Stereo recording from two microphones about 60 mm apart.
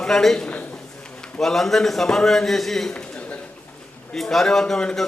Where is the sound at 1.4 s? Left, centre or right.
Centre.